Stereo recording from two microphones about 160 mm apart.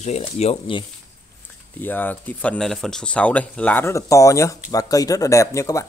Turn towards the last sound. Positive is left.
turn(degrees=20)  # may be behind; listen again after turning